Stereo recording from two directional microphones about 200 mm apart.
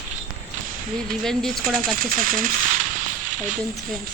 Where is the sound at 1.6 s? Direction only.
45° right (ahead or behind).